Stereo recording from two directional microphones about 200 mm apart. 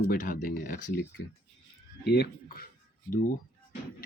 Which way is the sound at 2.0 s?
50° left (ahead or behind).